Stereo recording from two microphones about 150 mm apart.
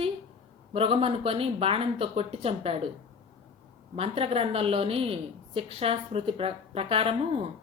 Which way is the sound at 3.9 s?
40° right (ahead or behind).